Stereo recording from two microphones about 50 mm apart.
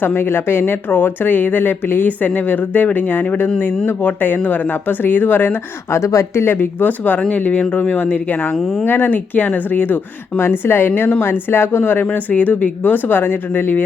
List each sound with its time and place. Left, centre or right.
0.0 s speech: left
5.9 s speech: left
8.5 s speech: centre
8.8 s speech: left
10.4 s speech: left
12.1 s speech: left